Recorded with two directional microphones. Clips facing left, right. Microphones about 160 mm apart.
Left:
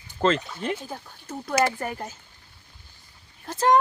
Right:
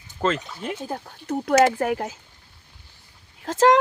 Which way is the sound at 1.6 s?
80° right.